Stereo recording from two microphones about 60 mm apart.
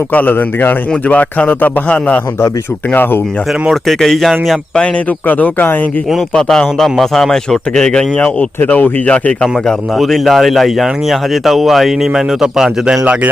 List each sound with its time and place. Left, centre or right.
0.1 s a man's voice: left
3.7 s speech: centre
5.3 s speech: left
6.3 s a man's voice: centre
8.6 s a man's voice: left
9.0 s a man's voice: centre
10.0 s speech: centre